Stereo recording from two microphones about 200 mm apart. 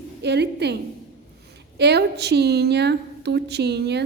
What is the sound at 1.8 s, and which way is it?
A woman's voice, 55° right (ahead or behind).